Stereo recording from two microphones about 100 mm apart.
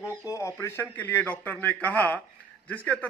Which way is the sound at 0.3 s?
30° left (ahead or behind).